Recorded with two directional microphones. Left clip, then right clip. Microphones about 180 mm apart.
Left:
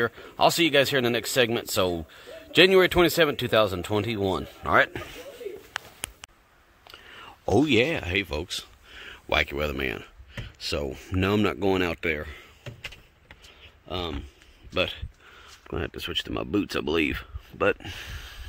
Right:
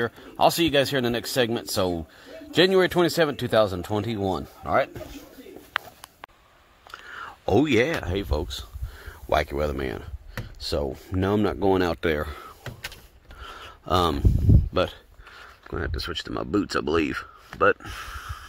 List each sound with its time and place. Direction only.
0.0 s speech: centre (ahead or behind)
6.9 s whispering: 5° left (ahead or behind)
7.6 s speech: 30° right (ahead or behind)
8.1 s speech: 5° right (ahead or behind)
13.5 s a sound: 50° right (ahead or behind)
14.7 s speech: 15° right (ahead or behind)
15.6 s speech: 10° left (ahead or behind)
17.7 s speech: 25° left (ahead or behind)